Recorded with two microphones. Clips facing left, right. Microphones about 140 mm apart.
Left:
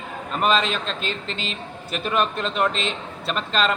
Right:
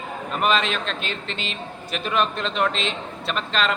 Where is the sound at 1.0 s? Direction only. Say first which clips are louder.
Left 1 dB; 40° left (ahead or behind).